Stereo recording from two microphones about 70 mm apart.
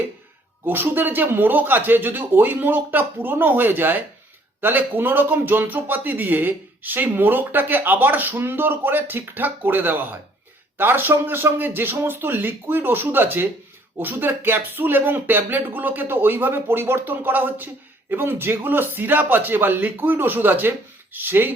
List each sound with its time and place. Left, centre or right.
0.6 s speech: right